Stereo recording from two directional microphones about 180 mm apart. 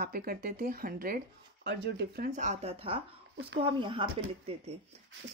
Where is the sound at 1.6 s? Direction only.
70° right (ahead or behind).